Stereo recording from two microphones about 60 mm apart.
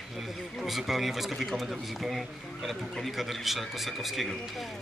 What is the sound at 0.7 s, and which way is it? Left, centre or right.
A man's voice, centre.